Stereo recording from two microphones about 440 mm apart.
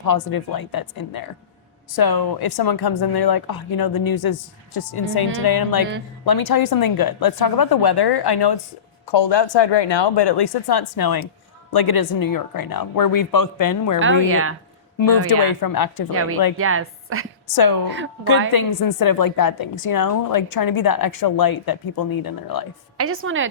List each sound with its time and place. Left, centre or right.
0.0 s a woman's voice: left
9.1 s a woman's voice: left
14.0 s a woman's voice: right
15.3 s a woman's voice: left
16.6 s a woman's voice: right
17.4 s a woman's voice: left
17.8 s a woman's voice: right
18.5 s a woman's voice: left
23.0 s a woman's voice: right